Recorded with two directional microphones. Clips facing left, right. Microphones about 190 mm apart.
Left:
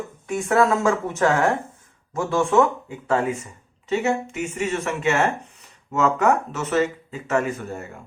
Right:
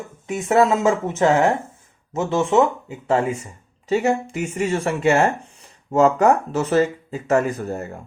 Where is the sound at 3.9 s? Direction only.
35° right (ahead or behind).